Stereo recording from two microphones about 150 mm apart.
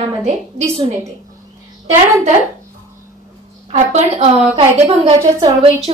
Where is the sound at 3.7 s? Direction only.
50° right (ahead or behind).